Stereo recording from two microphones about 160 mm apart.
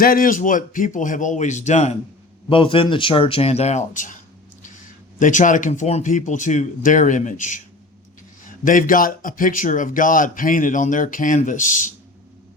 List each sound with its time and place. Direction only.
0.0 s speech: 65° left (ahead or behind); by 2.0 s 45° left (ahead or behind)
2.5 s speech: 35° left (ahead or behind); by 4.2 s 55° left (ahead or behind)
5.2 s speech: 55° left (ahead or behind)
8.6 s speech: 55° left (ahead or behind)